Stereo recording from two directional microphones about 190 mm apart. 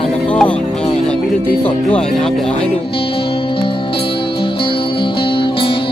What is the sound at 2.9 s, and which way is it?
Music, 30° left (ahead or behind).